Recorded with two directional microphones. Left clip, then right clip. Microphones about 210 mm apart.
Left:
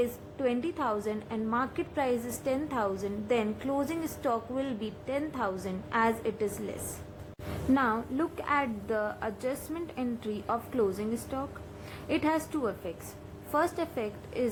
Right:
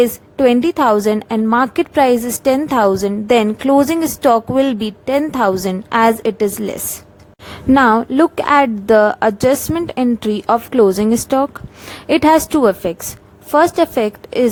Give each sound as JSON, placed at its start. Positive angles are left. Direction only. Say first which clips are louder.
{"t": 0.0, "sound": "a woman's voice", "louder": "right 18 dB", "side_deg": -55}